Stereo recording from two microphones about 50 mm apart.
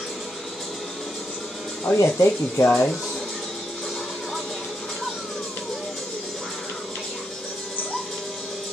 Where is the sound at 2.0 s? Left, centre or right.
Left.